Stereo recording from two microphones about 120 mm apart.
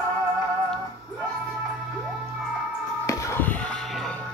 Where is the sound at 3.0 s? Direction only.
25° left (ahead or behind).